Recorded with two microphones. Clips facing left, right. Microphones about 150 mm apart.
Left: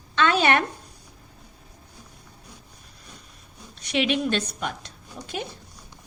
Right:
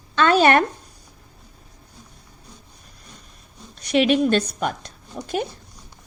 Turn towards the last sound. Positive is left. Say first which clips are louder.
# right 7 dB
turn(degrees=-45)  # may be behind; listen again after turning